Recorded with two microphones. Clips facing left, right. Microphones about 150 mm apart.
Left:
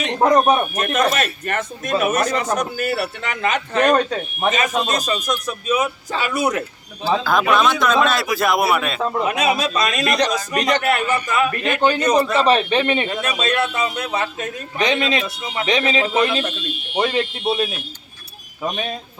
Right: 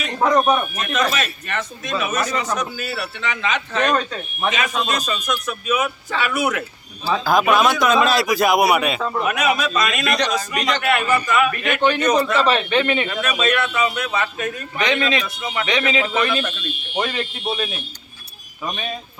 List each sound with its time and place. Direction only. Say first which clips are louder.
0.2 s a man's voice: left 2 dB; 40° left (ahead or behind)
0.7 s a man's voice: left 3 dB; 50° left (ahead or behind)
7.3 s a man's voice: right 2 dB; 5° right (ahead or behind)
9.0 s a man's voice: left 2 dB; 30° left (ahead or behind)
17.4 s a man's voice: left 3 dB; 5° left (ahead or behind)